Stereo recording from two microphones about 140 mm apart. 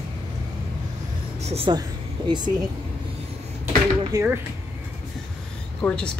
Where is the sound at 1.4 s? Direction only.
45° right (ahead or behind).